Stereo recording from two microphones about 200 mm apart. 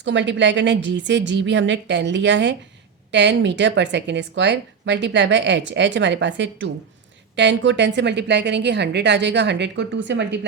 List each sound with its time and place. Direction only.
0.0 s a woman's voice: 65° right (ahead or behind)